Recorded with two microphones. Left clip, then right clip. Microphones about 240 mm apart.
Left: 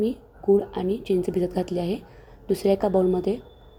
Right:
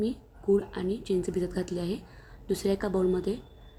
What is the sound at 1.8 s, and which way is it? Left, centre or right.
Speech, right.